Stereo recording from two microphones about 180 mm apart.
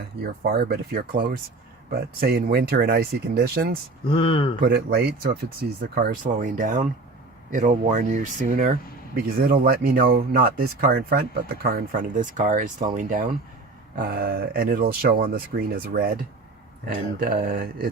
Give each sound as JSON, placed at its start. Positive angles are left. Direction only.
{"t": 0.4, "sound": "speech", "side_deg": -60}
{"t": 4.1, "sound": "speech", "side_deg": 30}
{"t": 4.6, "sound": "speech", "side_deg": -60}